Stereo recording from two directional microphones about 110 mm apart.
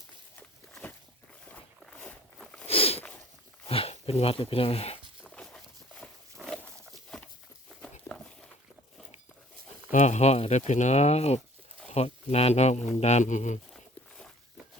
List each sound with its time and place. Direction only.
1.8 s walk: 10° left (ahead or behind)
2.6 s a sound: 60° left (ahead or behind)
3.7 s speech: 60° left (ahead or behind)
5.3 s a sound: 5° left (ahead or behind)
6.4 s pig: 10° right (ahead or behind)
7.8 s walk: 10° left (ahead or behind)
10.0 s speech: 90° left